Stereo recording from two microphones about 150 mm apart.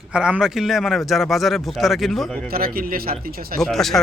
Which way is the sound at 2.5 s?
80° right.